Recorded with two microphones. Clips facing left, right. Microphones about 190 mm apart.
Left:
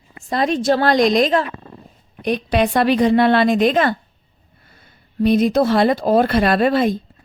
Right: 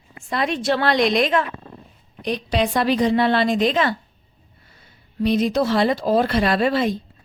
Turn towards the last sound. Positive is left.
turn(degrees=50)  # may be behind; listen again after turning